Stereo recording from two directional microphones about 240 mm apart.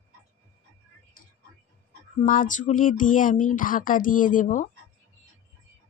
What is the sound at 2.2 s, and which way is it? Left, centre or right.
Speech, left.